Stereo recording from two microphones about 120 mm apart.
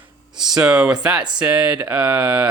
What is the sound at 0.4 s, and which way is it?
Speech, 5° right (ahead or behind).